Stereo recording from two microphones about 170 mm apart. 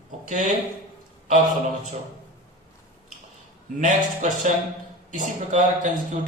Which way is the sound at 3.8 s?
45° right (ahead or behind).